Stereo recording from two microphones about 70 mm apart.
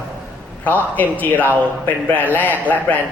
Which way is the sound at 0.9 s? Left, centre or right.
Left.